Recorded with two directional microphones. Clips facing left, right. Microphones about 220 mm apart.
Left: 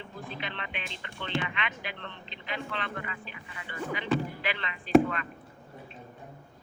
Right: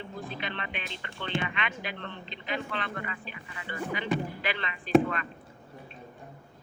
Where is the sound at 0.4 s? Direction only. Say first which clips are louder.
Right 2 dB; 45° right (ahead or behind).